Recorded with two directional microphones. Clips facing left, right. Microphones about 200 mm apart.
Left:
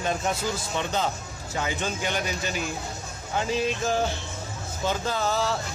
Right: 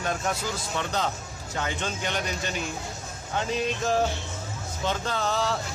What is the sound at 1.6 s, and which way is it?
Speech, 5° left (ahead or behind).